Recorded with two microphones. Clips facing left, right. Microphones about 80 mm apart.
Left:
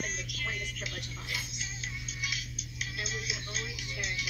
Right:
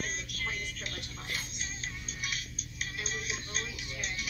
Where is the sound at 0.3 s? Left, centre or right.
Right.